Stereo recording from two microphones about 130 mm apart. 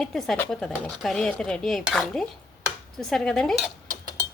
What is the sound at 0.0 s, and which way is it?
Speech, centre (ahead or behind).